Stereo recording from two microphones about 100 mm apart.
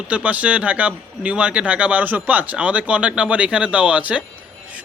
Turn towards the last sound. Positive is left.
turn(degrees=-15)  # may be behind; listen again after turning